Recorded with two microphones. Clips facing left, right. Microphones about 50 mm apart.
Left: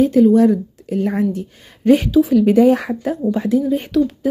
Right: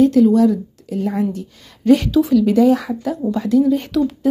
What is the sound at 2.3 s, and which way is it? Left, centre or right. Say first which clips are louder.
Speech: left 1 dB; left.